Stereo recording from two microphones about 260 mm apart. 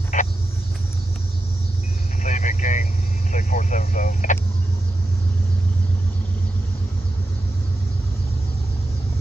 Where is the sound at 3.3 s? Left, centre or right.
Left.